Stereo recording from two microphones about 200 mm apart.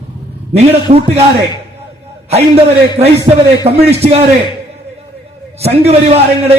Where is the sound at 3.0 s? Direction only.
30° right (ahead or behind).